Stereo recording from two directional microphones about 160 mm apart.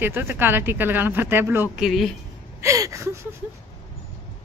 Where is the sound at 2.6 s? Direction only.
20° right (ahead or behind).